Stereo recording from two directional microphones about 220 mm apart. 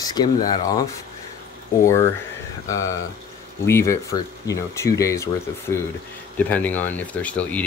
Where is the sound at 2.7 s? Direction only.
15° left (ahead or behind).